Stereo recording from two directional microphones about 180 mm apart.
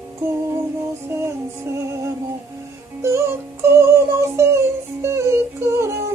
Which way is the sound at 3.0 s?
15° right (ahead or behind).